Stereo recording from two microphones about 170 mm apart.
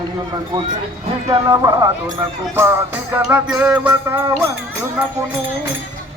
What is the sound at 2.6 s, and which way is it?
Music, 15° right (ahead or behind).